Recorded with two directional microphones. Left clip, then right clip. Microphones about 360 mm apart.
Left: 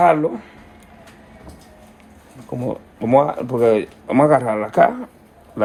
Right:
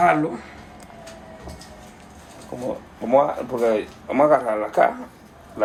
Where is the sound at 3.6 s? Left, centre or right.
Centre.